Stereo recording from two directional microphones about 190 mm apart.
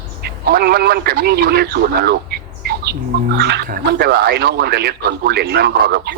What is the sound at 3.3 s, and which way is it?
A man's voice, 60° right (ahead or behind).